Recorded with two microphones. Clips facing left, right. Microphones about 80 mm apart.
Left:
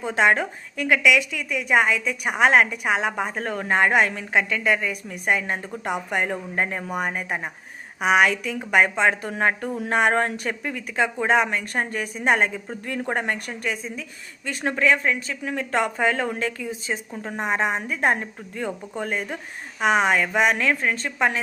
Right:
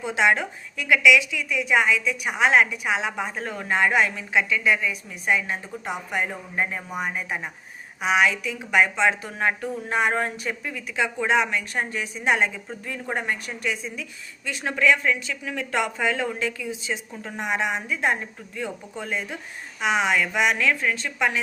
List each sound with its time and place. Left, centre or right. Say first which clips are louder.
0.0 s a woman's voice: left 2 dB; left